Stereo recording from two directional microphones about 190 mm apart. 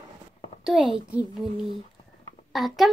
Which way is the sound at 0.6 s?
Centre (ahead or behind).